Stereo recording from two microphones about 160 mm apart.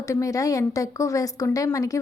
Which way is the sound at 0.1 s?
20° left (ahead or behind).